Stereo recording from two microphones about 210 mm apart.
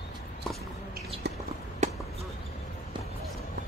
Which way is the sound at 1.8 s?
35° right (ahead or behind).